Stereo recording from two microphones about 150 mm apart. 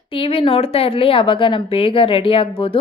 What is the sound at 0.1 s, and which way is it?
Speech, 40° left (ahead or behind).